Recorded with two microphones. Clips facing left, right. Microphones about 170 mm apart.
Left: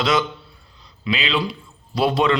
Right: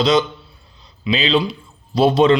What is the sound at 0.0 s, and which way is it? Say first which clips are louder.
Speech: right 5 dB; 20° right (ahead or behind).